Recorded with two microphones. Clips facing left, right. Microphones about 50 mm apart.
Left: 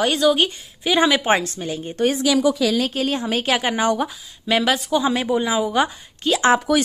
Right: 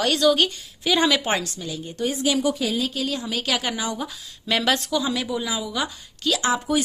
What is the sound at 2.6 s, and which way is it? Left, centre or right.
Speech, left.